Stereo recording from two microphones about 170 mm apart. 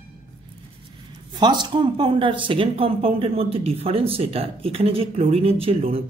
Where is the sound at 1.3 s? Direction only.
25° right (ahead or behind).